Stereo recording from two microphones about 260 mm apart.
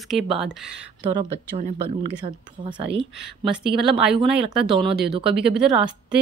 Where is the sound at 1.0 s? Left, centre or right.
Right.